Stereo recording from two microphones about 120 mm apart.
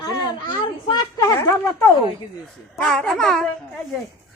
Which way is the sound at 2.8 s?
5° left (ahead or behind).